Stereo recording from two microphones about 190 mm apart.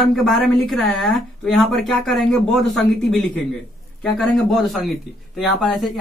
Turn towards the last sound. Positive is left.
turn(degrees=0)  # may be behind; listen again after turning